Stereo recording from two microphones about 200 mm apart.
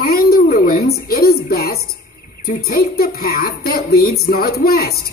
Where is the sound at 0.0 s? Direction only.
45° left (ahead or behind).